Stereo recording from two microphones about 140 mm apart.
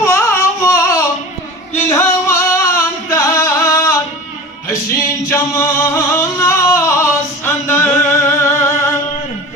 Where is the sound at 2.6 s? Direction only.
20° left (ahead or behind).